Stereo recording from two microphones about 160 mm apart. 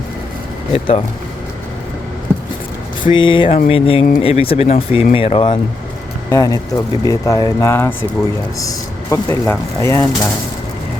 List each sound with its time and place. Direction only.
0.7 s speech: 35° left (ahead or behind)
3.1 s speech: 30° left (ahead or behind)
6.3 s speech: 20° left (ahead or behind)